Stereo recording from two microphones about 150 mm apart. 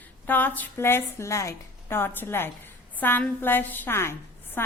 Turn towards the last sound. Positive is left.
turn(degrees=15)  # may be behind; listen again after turning